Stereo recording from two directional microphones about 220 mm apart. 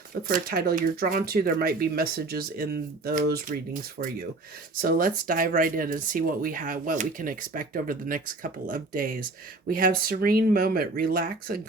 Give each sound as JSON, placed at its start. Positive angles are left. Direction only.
{"t": 0.2, "sound": "speech", "side_deg": -40}
{"t": 4.8, "sound": "speech", "side_deg": -40}